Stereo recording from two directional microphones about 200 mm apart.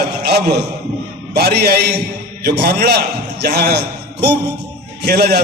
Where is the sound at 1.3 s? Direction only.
55° right (ahead or behind).